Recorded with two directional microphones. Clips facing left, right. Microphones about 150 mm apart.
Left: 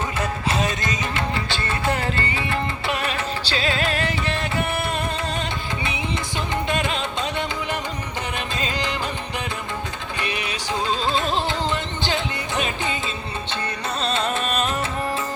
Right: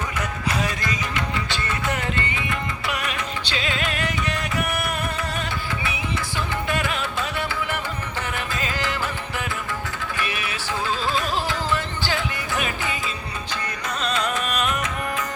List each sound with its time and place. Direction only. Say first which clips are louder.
0.2 s music: left 2 dB; 25° left (ahead or behind)
6.7 s music: left 1 dB; 25° left (ahead or behind)
10.2 s music: left 3 dB; 20° left (ahead or behind)
14.0 s music: left 1 dB; 30° left (ahead or behind)